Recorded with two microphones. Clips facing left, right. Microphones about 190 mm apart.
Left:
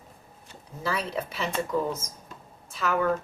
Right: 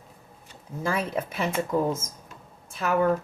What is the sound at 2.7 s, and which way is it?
Speech, 50° right (ahead or behind).